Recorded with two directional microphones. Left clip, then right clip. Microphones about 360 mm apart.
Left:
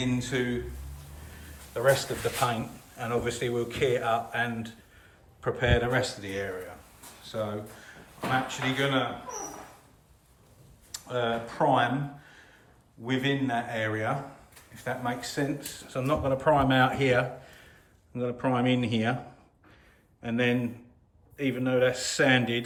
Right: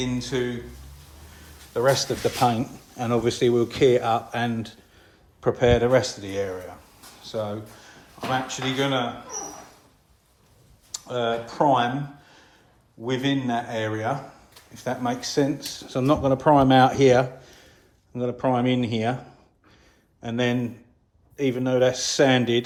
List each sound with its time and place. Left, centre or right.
0.0 s speech: centre
1.7 s speech: centre
7.2 s a sound: centre
8.4 s speech: centre
10.9 s speech: centre
20.2 s speech: centre